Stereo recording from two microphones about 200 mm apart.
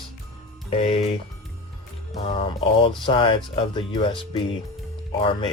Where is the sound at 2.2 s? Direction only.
25° left (ahead or behind).